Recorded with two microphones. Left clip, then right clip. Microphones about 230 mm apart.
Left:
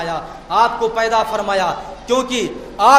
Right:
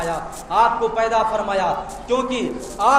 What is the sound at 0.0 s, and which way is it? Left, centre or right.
A man's voice, left.